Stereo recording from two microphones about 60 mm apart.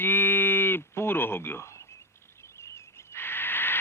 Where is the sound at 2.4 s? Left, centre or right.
Left.